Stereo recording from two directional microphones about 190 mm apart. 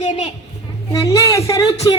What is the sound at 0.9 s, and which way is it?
A woman's voice, 15° left (ahead or behind).